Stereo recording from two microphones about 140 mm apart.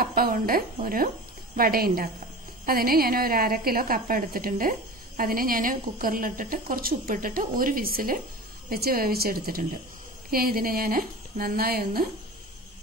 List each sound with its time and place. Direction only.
0.0 s speech: 90° right
1.6 s a woman's voice: 90° right